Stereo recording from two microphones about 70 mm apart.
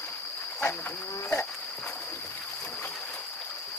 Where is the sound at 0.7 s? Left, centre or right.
Left.